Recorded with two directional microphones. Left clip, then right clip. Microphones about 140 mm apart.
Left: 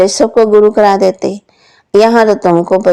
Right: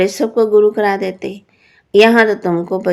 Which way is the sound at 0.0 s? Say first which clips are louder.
Left 6 dB; 40° left (ahead or behind).